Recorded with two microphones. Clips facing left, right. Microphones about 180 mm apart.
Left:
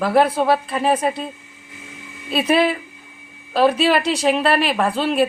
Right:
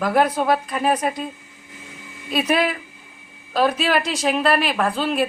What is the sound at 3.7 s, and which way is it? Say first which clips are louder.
Speech: left 4 dB; 35° left (ahead or behind).